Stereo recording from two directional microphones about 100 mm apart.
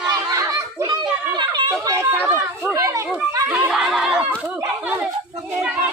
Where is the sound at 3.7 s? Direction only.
Centre (ahead or behind).